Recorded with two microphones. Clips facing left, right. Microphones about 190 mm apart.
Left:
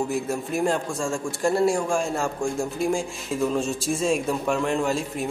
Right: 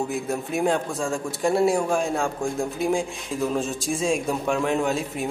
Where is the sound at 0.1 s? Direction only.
Centre (ahead or behind).